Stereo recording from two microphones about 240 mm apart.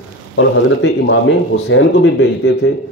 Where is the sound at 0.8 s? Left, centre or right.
Left.